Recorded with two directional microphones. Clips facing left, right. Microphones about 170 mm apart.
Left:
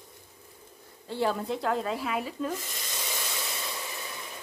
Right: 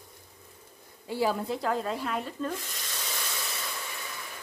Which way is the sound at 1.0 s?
5° right (ahead or behind).